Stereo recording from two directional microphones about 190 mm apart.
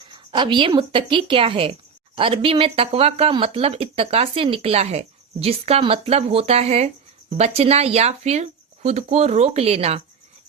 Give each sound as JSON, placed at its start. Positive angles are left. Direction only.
{"t": 0.3, "sound": "speech", "side_deg": -25}